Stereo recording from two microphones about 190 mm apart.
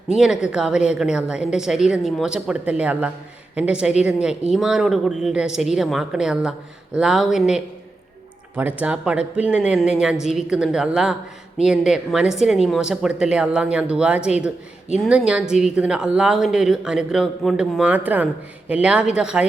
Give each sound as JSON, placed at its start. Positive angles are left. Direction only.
{"t": 0.1, "sound": "a woman's voice", "side_deg": -5}